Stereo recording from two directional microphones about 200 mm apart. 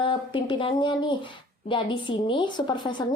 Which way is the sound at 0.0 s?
25° left (ahead or behind).